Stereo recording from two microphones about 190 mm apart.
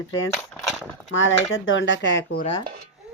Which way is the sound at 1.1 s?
90° left.